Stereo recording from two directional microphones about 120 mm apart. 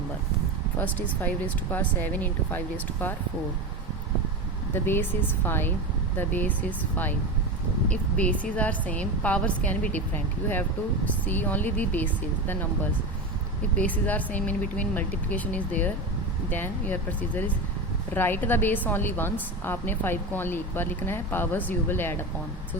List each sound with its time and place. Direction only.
0.8 s a woman's voice: 15° left (ahead or behind)
4.7 s a woman's voice: 20° left (ahead or behind)
11.3 s a woman's voice: 15° left (ahead or behind)
13.7 s a woman's voice: 15° left (ahead or behind)